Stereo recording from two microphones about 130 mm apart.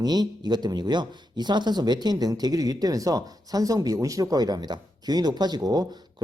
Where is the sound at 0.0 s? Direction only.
30° right (ahead or behind).